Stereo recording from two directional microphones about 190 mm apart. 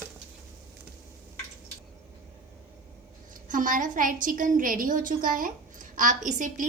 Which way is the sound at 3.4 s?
45° right (ahead or behind).